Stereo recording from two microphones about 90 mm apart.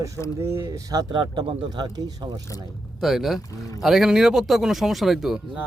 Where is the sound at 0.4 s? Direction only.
30° right (ahead or behind).